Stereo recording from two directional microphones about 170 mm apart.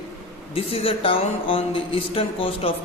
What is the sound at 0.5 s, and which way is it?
Speech, 35° left (ahead or behind).